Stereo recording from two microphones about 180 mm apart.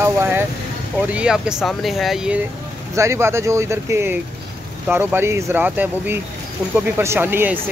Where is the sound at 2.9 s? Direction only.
15° right (ahead or behind).